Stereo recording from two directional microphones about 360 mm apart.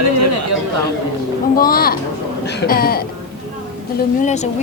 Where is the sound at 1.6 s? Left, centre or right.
Left.